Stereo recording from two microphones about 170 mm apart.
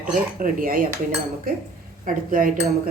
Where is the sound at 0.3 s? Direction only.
55° right (ahead or behind).